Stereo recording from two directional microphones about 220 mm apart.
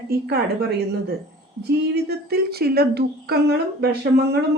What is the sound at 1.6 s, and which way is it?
A woman's voice, 45° right (ahead or behind).